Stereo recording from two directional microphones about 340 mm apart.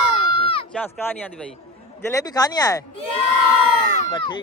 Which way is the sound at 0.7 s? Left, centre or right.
Centre.